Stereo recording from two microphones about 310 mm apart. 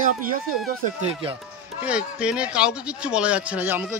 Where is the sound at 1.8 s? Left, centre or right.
Centre.